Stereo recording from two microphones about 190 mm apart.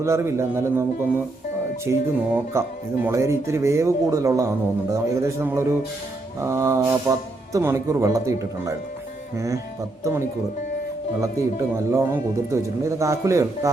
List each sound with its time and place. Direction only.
0.0 s speech: 15° right (ahead or behind)
10.0 s speech: 15° right (ahead or behind)
11.9 s speech: 15° right (ahead or behind)